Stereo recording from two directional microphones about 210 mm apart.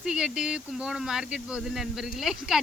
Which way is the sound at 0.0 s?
5° right (ahead or behind).